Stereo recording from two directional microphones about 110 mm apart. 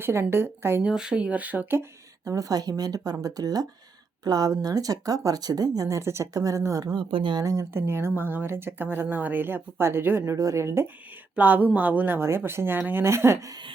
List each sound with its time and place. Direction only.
0.0 s speech: 20° right (ahead or behind)
0.8 s speech: 5° right (ahead or behind); by 7.0 s 35° right (ahead or behind)
7.0 s speech: 50° right (ahead or behind)
7.4 s speech: 25° right (ahead or behind)